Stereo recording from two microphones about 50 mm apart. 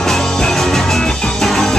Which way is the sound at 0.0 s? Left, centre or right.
Centre.